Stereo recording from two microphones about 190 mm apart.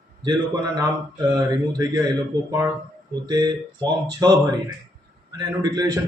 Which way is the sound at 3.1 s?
20° right (ahead or behind).